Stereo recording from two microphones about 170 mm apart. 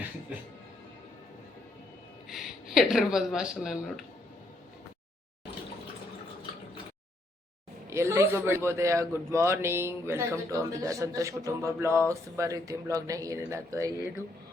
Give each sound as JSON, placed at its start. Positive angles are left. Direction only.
{"t": 2.3, "sound": "speech", "side_deg": 0}
{"t": 7.9, "sound": "a man's voice", "side_deg": -15}